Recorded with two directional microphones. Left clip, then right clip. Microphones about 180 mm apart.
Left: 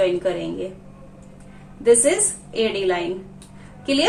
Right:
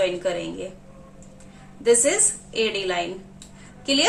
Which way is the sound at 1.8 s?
15° right (ahead or behind).